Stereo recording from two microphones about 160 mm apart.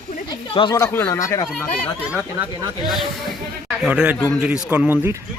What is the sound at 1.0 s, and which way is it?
Speech, 20° left (ahead or behind).